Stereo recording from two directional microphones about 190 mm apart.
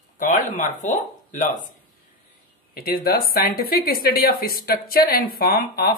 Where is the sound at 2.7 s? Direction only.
50° left (ahead or behind).